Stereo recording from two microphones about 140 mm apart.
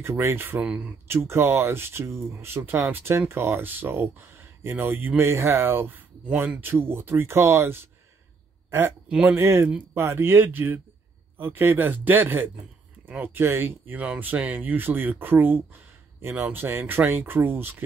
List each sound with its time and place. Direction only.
0.0 s speech: 20° right (ahead or behind)
8.6 s a sound: 20° right (ahead or behind)
9.1 s speech: 10° right (ahead or behind)